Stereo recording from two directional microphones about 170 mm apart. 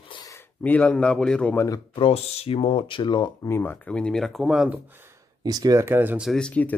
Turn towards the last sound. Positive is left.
turn(degrees=5)  # may be behind; listen again after turning